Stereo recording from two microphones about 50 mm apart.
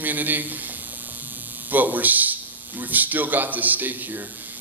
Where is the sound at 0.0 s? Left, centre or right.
Right.